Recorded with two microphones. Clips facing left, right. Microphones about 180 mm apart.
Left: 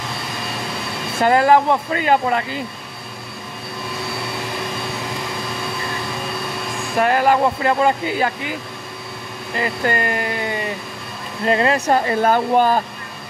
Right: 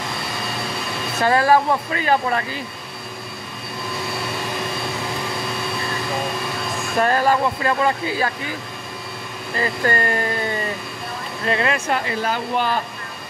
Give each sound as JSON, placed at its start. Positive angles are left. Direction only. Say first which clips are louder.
{"t": 1.2, "sound": "speech", "louder": "left 2 dB", "side_deg": 20}
{"t": 7.0, "sound": "speech", "louder": "left 2 dB", "side_deg": 15}
{"t": 9.6, "sound": "speech", "louder": "even", "side_deg": 15}
{"t": 11.4, "sound": "speech", "louder": "left 5 dB", "side_deg": 30}